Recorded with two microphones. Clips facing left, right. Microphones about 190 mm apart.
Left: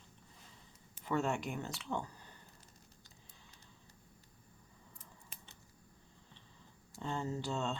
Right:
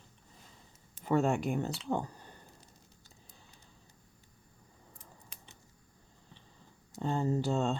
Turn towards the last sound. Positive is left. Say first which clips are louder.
# right 7 dB
turn(degrees=-45)  # may be behind; listen again after turning